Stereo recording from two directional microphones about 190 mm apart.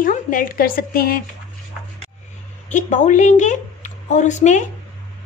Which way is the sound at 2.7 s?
40° left (ahead or behind).